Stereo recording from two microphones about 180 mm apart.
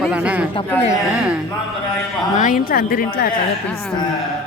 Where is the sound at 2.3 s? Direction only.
50° left (ahead or behind).